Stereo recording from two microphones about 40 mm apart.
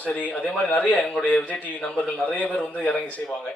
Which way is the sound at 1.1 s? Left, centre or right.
Left.